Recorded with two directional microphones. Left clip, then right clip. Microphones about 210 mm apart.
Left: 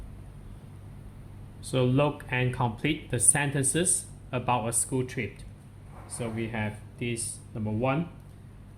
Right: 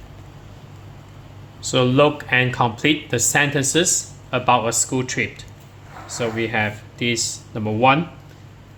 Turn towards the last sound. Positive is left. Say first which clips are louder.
# right 13 dB
turn(degrees=-20)  # may be behind; listen again after turning